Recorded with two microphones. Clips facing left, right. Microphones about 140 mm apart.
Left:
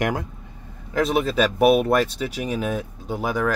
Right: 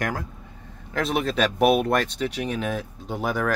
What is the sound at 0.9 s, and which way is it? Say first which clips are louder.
Speech: left 4 dB; centre (ahead or behind).